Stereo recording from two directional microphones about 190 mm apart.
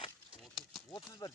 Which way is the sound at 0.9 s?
20° left (ahead or behind).